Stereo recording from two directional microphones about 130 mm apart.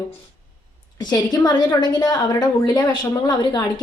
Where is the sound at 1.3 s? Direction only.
30° left (ahead or behind).